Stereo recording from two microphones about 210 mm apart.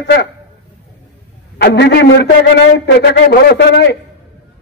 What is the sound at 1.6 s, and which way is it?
Speech, 50° left (ahead or behind).